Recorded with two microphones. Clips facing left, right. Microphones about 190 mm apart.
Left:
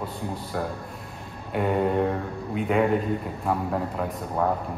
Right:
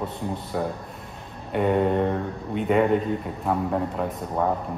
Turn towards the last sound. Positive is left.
turn(degrees=0)  # may be behind; listen again after turning